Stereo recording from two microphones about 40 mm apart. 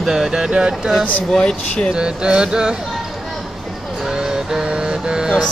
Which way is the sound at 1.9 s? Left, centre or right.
Right.